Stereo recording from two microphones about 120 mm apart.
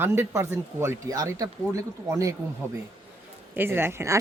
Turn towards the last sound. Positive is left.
turn(degrees=-20)  # may be behind; listen again after turning